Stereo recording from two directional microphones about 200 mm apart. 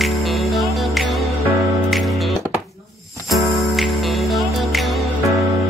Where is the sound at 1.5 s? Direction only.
15° right (ahead or behind).